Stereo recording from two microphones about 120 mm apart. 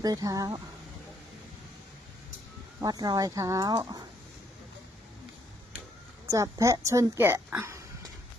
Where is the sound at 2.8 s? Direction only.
30° right (ahead or behind).